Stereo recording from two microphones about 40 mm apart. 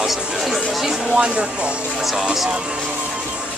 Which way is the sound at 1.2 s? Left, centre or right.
Right.